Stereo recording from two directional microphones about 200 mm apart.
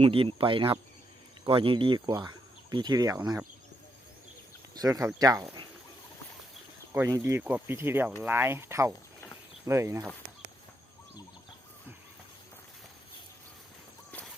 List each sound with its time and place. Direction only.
0.0 s speech: 25° right (ahead or behind)
4.7 s speech: 15° right (ahead or behind)
6.9 s speech: 15° right (ahead or behind)